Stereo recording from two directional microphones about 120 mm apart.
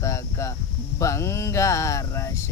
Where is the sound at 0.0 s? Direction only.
25° left (ahead or behind).